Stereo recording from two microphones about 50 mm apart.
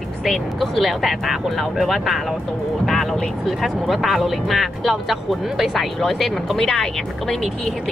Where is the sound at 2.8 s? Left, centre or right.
Centre.